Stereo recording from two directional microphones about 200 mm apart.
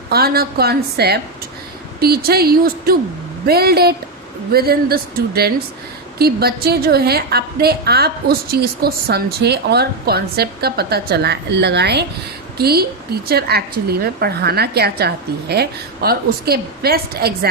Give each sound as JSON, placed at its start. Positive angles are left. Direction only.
{"t": 0.1, "sound": "a woman's voice", "side_deg": -50}